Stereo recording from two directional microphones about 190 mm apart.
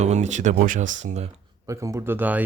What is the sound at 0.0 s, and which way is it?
Speech, 35° right (ahead or behind).